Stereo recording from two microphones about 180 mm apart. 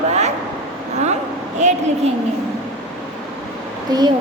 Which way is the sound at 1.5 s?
40° right (ahead or behind).